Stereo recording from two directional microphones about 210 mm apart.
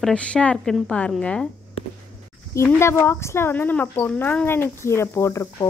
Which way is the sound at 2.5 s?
10° left (ahead or behind).